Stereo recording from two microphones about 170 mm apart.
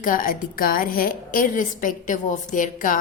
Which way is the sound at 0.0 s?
55° left (ahead or behind).